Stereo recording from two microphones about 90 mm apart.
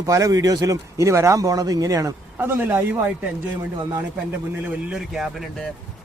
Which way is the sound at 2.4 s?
25° right (ahead or behind).